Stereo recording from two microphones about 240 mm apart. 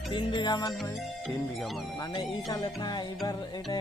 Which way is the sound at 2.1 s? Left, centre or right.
Centre.